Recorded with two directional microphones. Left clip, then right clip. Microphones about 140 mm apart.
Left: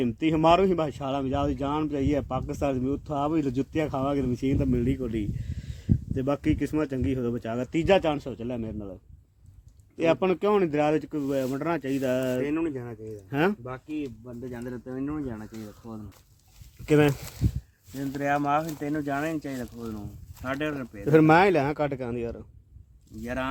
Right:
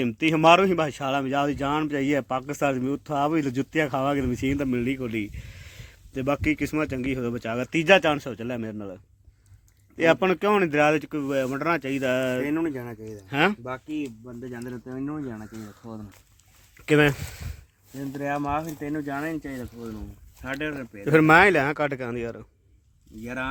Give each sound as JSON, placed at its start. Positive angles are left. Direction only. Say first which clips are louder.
{"t": 0.0, "sound": "speech", "louder": "right 3 dB", "side_deg": -15}
{"t": 10.0, "sound": "speech", "louder": "right 3 dB", "side_deg": -15}
{"t": 12.5, "sound": "speech", "louder": "right 2 dB", "side_deg": -90}
{"t": 13.3, "sound": "speech", "louder": "right 3 dB", "side_deg": 5}
{"t": 13.7, "sound": "speech", "louder": "right 3 dB", "side_deg": -90}
{"t": 14.6, "sound": "speech", "louder": "even", "side_deg": -55}
{"t": 15.8, "sound": "speech", "louder": "right 3 dB", "side_deg": -90}
{"t": 16.8, "sound": "speech", "louder": "right 2 dB", "side_deg": -5}
{"t": 18.7, "sound": "speech", "louder": "left 1 dB", "side_deg": 15}
{"t": 21.0, "sound": "speech", "louder": "right 2 dB", "side_deg": 5}
{"t": 23.2, "sound": "speech", "louder": "even", "side_deg": 25}